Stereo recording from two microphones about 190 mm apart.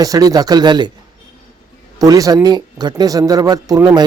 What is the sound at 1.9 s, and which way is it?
Speech, 20° right (ahead or behind).